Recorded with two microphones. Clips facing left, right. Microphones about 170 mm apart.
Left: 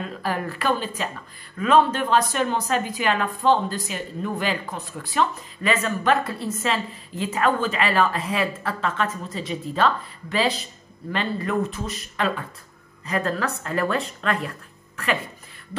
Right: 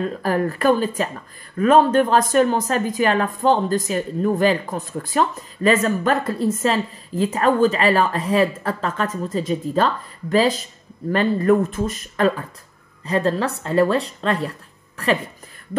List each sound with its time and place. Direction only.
0.0 s speech: 45° right (ahead or behind)
13.0 s speech: 30° right (ahead or behind)